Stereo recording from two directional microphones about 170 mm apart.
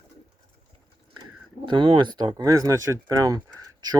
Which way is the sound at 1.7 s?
25° right (ahead or behind).